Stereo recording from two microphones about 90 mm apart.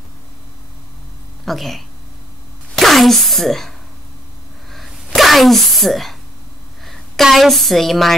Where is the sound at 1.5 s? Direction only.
Centre (ahead or behind).